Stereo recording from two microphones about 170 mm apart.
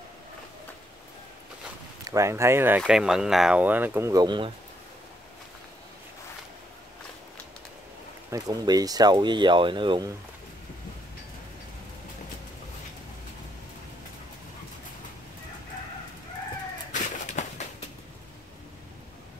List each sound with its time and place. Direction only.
2.0 s speech: 15° right (ahead or behind)
2.8 s speech: 5° right (ahead or behind); by 4.5 s 25° right (ahead or behind)
8.3 s speech: 20° right (ahead or behind)
16.9 s bird: 45° left (ahead or behind)